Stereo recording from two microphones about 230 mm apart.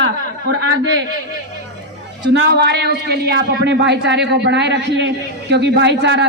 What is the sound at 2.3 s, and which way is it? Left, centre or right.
Speech, right.